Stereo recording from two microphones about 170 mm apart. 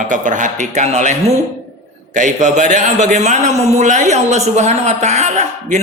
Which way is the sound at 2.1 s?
45° right (ahead or behind).